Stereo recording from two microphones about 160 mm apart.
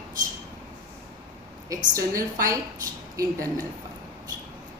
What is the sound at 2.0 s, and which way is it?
Speech, 20° right (ahead or behind).